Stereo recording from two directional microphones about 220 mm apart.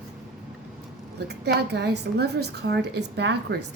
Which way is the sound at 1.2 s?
50° right (ahead or behind).